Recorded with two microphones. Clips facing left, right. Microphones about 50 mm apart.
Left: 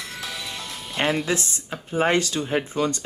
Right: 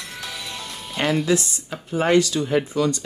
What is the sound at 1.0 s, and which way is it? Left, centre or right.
Speech, left.